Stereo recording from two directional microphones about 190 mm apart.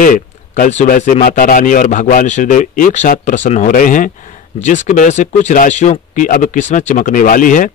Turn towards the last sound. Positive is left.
turn(degrees=45)  # may be behind; listen again after turning